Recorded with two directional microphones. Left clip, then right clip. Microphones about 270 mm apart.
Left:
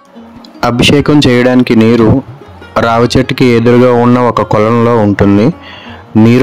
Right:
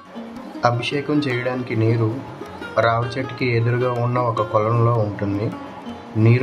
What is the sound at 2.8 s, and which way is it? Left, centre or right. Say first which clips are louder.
Speech: left 12 dB; left.